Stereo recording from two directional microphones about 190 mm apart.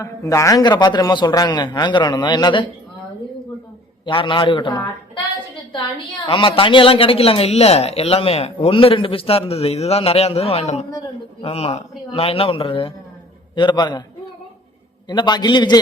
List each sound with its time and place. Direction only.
0.0 s a man's voice: 15° left (ahead or behind)
4.0 s a man's voice: 25° left (ahead or behind)
6.2 s a man's voice: 25° left (ahead or behind)
15.0 s a man's voice: 25° left (ahead or behind)